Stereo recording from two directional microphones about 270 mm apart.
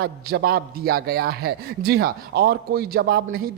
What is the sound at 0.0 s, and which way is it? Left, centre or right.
A man's voice, right.